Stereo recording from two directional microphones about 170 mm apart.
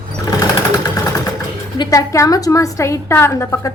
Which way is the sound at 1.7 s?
20° left (ahead or behind).